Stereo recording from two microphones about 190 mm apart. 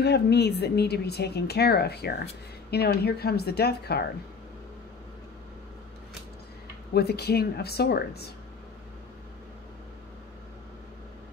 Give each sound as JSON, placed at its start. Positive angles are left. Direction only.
{"t": 0.0, "sound": "a woman's voice", "side_deg": 60}
{"t": 6.9, "sound": "a woman's voice", "side_deg": 55}